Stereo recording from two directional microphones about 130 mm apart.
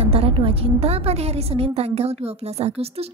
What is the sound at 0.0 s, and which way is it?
A woman's voice, 50° right (ahead or behind).